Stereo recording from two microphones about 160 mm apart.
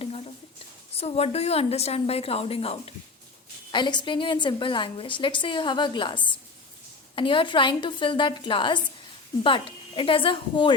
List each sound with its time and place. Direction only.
0.9 s a woman's voice: 40° left (ahead or behind)